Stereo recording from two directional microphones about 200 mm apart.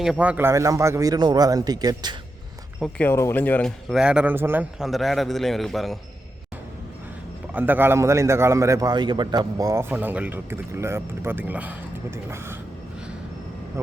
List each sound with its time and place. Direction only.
0.0 s a man's voice: 5° right (ahead or behind)
2.8 s speech: 10° left (ahead or behind)
7.5 s a man's voice: 10° right (ahead or behind)
13.8 s a man's voice: 15° right (ahead or behind)